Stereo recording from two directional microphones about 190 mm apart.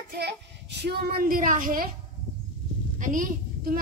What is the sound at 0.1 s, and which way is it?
A child's voice, 60° right (ahead or behind).